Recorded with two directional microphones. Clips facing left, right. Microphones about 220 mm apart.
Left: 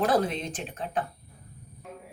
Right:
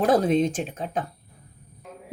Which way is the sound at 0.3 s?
45° right (ahead or behind).